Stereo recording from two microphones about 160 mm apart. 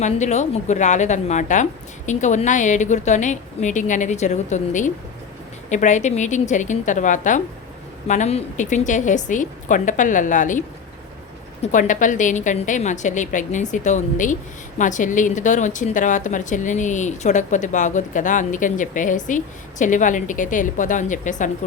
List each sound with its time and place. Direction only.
0.0 s a woman's voice: 45° left (ahead or behind)
11.6 s a woman's voice: 50° left (ahead or behind)